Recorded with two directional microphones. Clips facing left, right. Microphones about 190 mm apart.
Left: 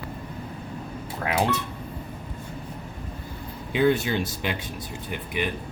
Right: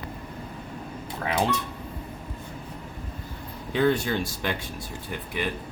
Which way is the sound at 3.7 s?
15° left (ahead or behind).